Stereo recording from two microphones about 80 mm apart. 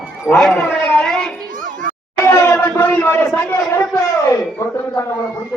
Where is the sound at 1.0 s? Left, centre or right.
Centre.